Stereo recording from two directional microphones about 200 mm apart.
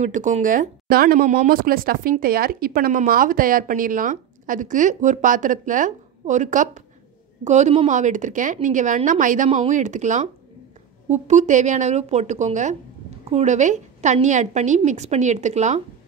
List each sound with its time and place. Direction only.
0.0 s speech: 40° right (ahead or behind)